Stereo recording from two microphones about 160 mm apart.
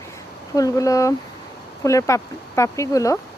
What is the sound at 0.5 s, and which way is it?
Speech, 20° left (ahead or behind).